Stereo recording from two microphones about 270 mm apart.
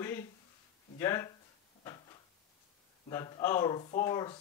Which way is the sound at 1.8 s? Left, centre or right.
Centre.